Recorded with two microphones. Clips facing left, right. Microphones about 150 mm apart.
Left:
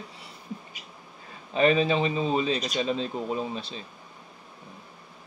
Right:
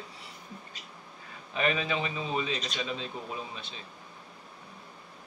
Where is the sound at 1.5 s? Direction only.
35° left (ahead or behind).